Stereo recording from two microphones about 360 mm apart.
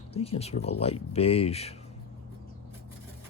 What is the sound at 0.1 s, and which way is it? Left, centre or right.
Speech, centre.